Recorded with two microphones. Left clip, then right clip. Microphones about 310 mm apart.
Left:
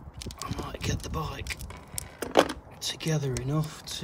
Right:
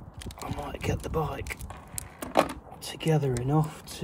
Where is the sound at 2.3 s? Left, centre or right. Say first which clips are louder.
Left 2 dB; left.